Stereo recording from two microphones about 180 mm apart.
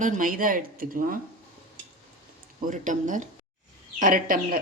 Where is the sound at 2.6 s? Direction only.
45° right (ahead or behind).